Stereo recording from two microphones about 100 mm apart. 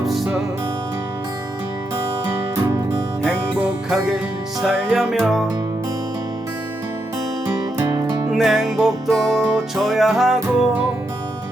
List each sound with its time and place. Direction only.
3.8 s music: centre (ahead or behind)
7.4 s music: 35° right (ahead or behind)
8.3 s music: centre (ahead or behind)